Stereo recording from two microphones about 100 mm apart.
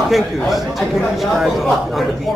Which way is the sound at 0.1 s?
Centre (ahead or behind).